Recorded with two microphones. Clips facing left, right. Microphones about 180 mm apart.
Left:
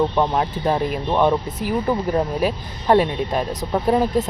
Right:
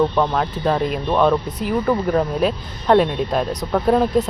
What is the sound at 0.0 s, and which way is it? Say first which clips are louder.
Speech: right 1 dB; 15° left (ahead or behind).